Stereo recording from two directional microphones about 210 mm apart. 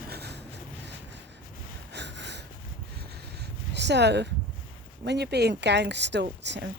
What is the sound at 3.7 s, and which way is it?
Speech, 55° right (ahead or behind).